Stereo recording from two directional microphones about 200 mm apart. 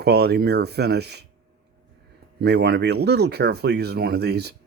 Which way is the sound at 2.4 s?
55° right (ahead or behind).